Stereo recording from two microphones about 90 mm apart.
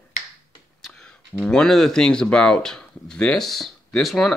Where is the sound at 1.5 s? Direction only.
5° left (ahead or behind).